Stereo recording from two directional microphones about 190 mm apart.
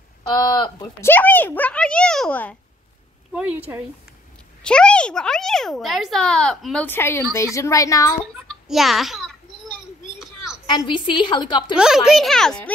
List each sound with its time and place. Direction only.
0.6 s a woman's voice: 20° left (ahead or behind)
1.1 s speech: 10° left (ahead or behind)
3.3 s speech: 10° right (ahead or behind)
4.6 s a child's voice: 5° left (ahead or behind)
8.5 s a sound: centre (ahead or behind)
10.7 s a woman's voice: 25° left (ahead or behind)
11.7 s a child's voice: 5° right (ahead or behind)